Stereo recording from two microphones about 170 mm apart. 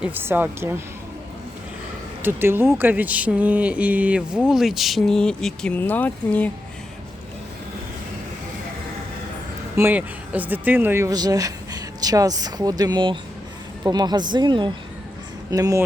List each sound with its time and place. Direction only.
0.0 s speech: 10° right (ahead or behind)
2.2 s speech: 15° right (ahead or behind); by 6.5 s 10° left (ahead or behind)
9.7 s speech: 10° right (ahead or behind)